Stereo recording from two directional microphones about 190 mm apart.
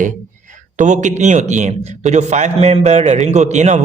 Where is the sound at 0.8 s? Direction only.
40° right (ahead or behind).